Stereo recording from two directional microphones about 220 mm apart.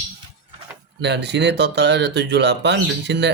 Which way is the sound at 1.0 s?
50° right (ahead or behind).